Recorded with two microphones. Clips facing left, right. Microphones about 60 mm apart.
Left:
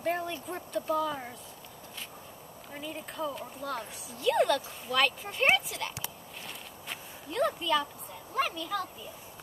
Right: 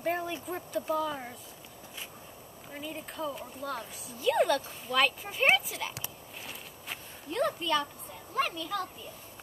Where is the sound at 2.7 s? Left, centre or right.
Centre.